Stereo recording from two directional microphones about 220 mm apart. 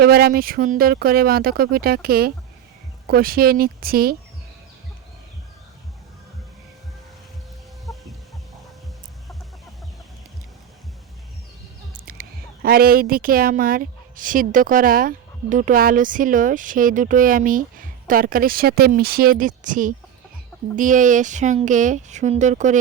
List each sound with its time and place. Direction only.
0.0 s speech: 45° right (ahead or behind)
12.1 s a sound: 40° right (ahead or behind)
12.6 s a woman's voice: 45° right (ahead or behind)